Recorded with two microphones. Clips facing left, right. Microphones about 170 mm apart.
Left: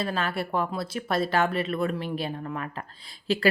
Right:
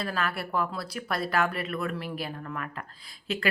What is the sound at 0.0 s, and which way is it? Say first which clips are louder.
Speech: left 3 dB; 25° left (ahead or behind).